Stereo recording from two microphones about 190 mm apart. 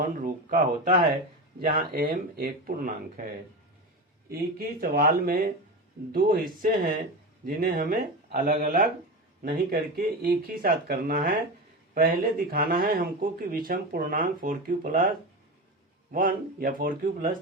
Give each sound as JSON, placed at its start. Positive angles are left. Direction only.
{"t": 0.0, "sound": "speech", "side_deg": -45}
{"t": 4.3, "sound": "speech", "side_deg": -55}
{"t": 16.1, "sound": "speech", "side_deg": -50}